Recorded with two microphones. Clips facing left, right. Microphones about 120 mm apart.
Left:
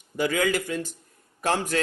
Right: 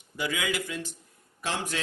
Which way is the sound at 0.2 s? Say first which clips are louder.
Left 6 dB; 45° left (ahead or behind).